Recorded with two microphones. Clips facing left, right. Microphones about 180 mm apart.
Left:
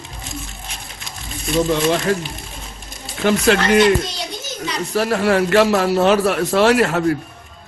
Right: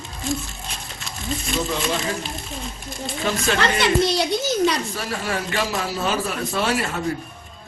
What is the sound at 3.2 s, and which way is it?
Speech, 70° left (ahead or behind).